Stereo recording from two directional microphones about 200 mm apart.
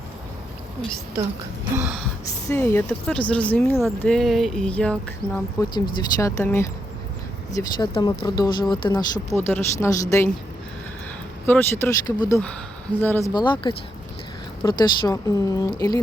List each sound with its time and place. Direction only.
2.5 s speech: 10° left (ahead or behind)
5.7 s speech: 20° left (ahead or behind)
11.4 s speech: 10° left (ahead or behind)